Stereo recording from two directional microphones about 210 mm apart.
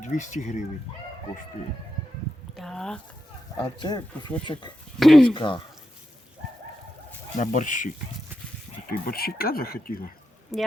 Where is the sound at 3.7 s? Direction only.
20° left (ahead or behind).